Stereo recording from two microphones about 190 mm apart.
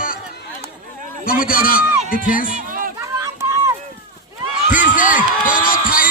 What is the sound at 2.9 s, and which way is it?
Run, 15° right (ahead or behind).